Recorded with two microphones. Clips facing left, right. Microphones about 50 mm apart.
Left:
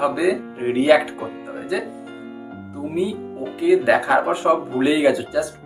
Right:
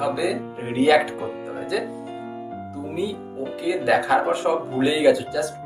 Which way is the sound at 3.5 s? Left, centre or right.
Left.